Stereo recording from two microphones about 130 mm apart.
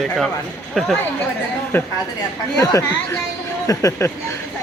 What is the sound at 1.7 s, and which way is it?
A woman's voice, 15° left (ahead or behind).